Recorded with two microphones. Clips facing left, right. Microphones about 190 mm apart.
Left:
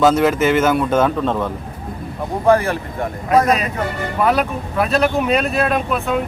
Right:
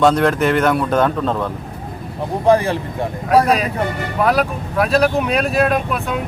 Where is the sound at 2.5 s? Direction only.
15° right (ahead or behind).